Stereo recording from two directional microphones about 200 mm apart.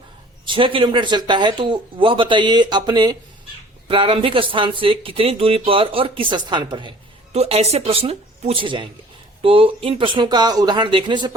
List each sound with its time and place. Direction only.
0.4 s speech: 25° right (ahead or behind)